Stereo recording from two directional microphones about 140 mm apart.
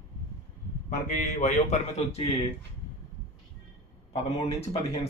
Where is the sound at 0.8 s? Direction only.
60° left (ahead or behind).